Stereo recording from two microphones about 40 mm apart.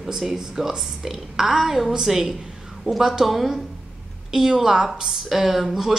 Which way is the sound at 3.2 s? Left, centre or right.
Centre.